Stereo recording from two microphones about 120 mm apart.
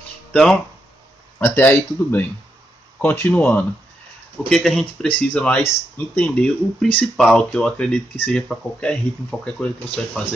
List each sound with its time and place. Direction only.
0.3 s speech: 5° left (ahead or behind)
1.4 s speech: 15° left (ahead or behind)